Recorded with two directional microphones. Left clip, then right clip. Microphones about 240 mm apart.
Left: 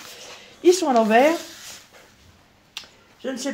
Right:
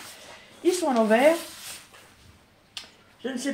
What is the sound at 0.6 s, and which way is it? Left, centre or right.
Speech, left.